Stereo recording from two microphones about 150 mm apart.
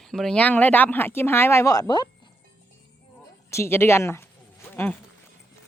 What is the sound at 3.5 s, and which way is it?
Speech, 15° left (ahead or behind).